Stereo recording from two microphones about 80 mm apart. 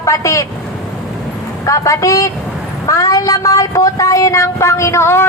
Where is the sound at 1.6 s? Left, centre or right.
Left.